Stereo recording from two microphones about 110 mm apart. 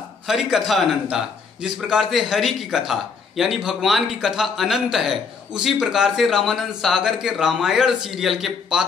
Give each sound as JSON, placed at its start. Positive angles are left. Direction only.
{"t": 0.3, "sound": "a man's voice", "side_deg": -5}